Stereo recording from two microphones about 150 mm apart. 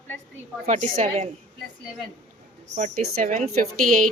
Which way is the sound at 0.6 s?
55° right (ahead or behind).